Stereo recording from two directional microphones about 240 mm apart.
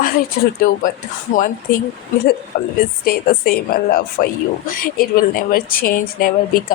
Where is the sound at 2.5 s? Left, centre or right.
Left.